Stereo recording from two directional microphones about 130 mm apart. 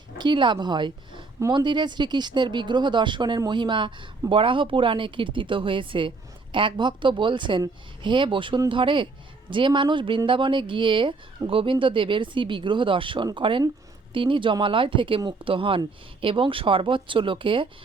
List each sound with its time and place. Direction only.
0.2 s speech: 35° right (ahead or behind)